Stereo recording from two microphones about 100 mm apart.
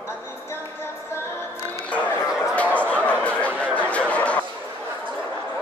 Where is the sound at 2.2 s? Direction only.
5° right (ahead or behind).